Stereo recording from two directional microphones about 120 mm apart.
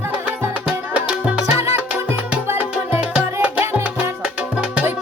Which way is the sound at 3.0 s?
10° right (ahead or behind).